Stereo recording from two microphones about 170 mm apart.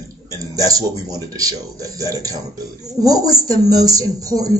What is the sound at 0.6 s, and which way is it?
Speech, 20° right (ahead or behind).